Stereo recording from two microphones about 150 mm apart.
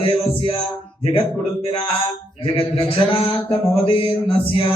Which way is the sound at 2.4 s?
40° left (ahead or behind).